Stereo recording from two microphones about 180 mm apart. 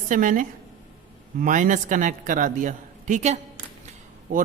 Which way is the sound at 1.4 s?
45° right (ahead or behind).